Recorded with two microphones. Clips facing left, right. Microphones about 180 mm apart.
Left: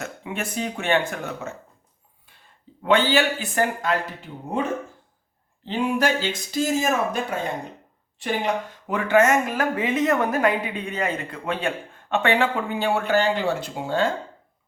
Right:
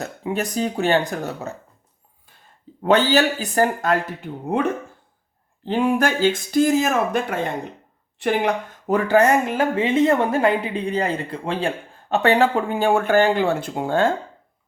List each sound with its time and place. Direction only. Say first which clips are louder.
0.0 s speech: right 5 dB; 35° right (ahead or behind)
2.8 s speech: right 3 dB; 40° right (ahead or behind)
5.6 s speech: right 3 dB; 55° right (ahead or behind)
8.9 s speech: right 2 dB; 35° right (ahead or behind); by 14.1 s 50° right (ahead or behind)